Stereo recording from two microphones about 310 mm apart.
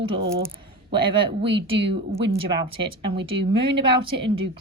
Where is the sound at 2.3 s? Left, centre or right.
Centre.